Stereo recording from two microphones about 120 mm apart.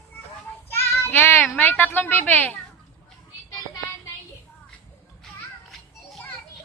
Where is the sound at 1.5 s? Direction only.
15° left (ahead or behind).